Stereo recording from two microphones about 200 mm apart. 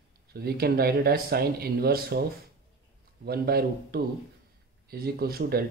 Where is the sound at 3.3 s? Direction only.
50° right (ahead or behind).